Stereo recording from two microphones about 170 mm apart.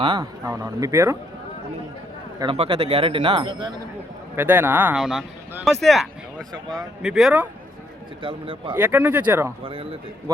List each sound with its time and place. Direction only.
0.0 s speech: 25° right (ahead or behind)
2.4 s speech: 30° right (ahead or behind)
4.4 s speech: 10° right (ahead or behind)
6.5 s speech: 25° right (ahead or behind)
7.0 s speech: centre (ahead or behind)
8.2 s speech: 30° right (ahead or behind)
8.7 s speech: 10° right (ahead or behind)
9.6 s speech: 30° right (ahead or behind)